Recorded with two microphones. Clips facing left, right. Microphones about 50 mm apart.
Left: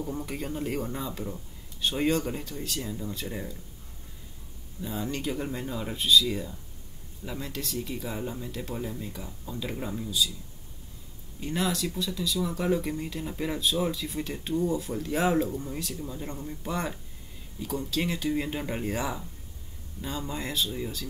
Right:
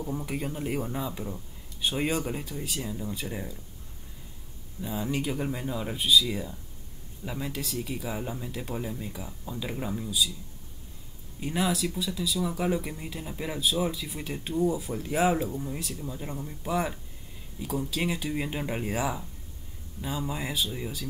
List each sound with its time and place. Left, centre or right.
0.0 s speech: centre
4.8 s speech: centre
11.3 s speech: centre